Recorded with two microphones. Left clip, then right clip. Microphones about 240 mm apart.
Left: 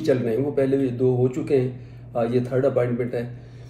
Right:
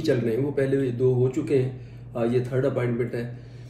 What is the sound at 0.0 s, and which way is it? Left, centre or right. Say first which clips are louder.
Speech: left 2 dB; centre.